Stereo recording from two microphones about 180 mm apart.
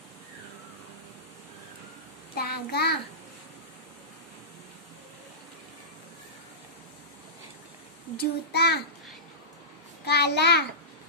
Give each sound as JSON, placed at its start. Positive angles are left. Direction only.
{"t": 2.3, "sound": "child singing", "side_deg": 60}
{"t": 8.2, "sound": "child singing", "side_deg": 65}
{"t": 10.0, "sound": "a child's voice", "side_deg": 65}